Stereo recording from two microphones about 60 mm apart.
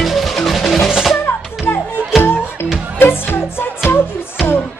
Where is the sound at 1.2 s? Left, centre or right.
Left.